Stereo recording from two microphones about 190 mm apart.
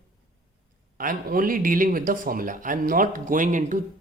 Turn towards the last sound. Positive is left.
turn(degrees=-45)  # may be behind; listen again after turning